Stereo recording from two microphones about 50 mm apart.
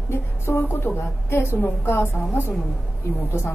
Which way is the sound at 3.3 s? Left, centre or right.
Left.